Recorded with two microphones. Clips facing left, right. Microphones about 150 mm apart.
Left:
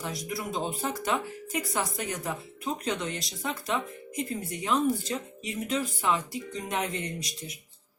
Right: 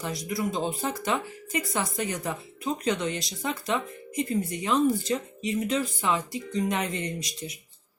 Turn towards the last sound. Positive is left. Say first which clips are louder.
# right 2 dB
turn(degrees=0)  # may be behind; listen again after turning